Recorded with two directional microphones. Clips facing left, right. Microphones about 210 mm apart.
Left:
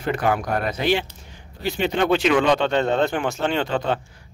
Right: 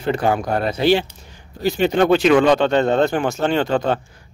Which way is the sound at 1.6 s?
40° right (ahead or behind).